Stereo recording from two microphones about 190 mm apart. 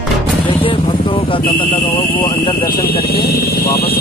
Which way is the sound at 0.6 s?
25° left (ahead or behind).